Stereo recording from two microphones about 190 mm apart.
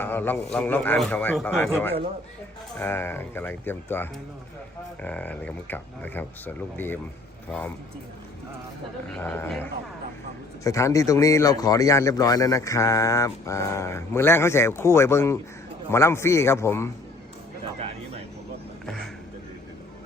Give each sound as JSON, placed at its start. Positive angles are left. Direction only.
{"t": 0.0, "sound": "speech", "side_deg": 10}
{"t": 9.1, "sound": "speech", "side_deg": 10}